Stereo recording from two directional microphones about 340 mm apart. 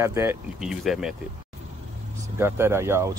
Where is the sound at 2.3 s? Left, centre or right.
Centre.